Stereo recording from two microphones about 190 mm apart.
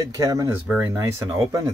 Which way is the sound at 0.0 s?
15° right (ahead or behind).